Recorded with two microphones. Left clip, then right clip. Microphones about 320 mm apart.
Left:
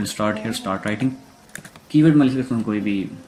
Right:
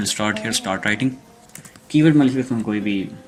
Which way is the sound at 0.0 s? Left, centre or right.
Right.